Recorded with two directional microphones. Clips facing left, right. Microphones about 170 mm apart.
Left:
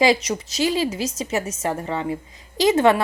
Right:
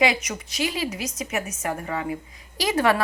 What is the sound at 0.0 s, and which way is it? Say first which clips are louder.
A woman's voice: left 5 dB; 30° left (ahead or behind).